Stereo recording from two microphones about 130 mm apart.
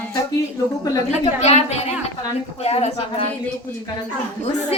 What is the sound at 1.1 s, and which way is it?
A woman's voice, 60° left (ahead or behind).